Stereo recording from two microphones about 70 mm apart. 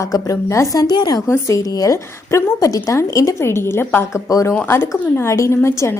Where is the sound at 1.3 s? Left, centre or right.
Left.